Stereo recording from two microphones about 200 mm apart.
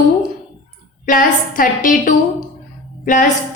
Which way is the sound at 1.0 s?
45° left (ahead or behind).